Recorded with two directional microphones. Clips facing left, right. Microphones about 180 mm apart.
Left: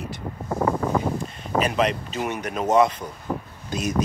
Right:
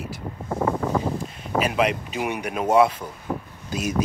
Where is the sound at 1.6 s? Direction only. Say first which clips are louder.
Even; 5° right (ahead or behind).